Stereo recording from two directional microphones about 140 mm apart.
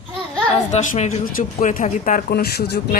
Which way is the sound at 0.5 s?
60° left (ahead or behind).